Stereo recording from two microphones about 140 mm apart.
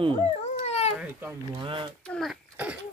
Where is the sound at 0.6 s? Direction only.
50° left (ahead or behind).